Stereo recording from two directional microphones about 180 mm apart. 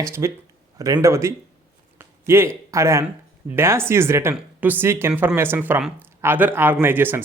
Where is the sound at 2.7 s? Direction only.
15° right (ahead or behind).